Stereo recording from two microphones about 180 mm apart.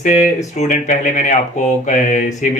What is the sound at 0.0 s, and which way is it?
Speech, 40° left (ahead or behind).